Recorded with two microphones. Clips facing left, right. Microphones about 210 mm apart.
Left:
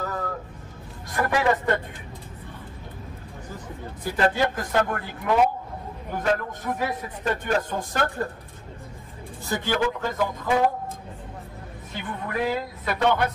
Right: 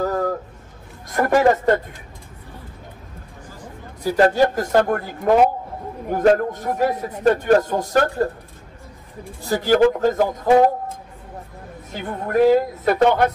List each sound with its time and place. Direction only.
0.0 s music: 40° right (ahead or behind)
1.1 s a man's voice: 45° right (ahead or behind)
4.0 s a man's voice: 40° right (ahead or behind)
9.5 s a man's voice: 40° right (ahead or behind)
11.9 s a man's voice: 45° right (ahead or behind)